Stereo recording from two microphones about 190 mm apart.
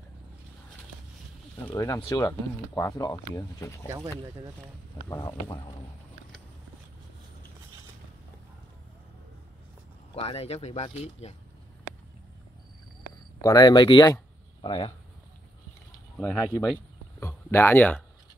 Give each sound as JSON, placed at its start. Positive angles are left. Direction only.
{"t": 1.7, "sound": "speech", "side_deg": 15}
{"t": 5.0, "sound": "speech", "side_deg": 20}
{"t": 10.1, "sound": "speech", "side_deg": 30}
{"t": 13.4, "sound": "speech", "side_deg": 20}
{"t": 16.2, "sound": "speech", "side_deg": 10}